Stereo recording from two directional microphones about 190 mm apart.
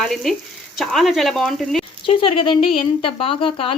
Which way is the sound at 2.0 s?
25° left (ahead or behind).